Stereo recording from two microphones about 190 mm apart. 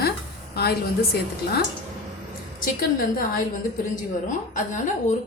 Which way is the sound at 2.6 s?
50° left (ahead or behind).